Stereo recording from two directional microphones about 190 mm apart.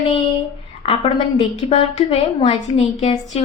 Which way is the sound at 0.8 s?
30° left (ahead or behind).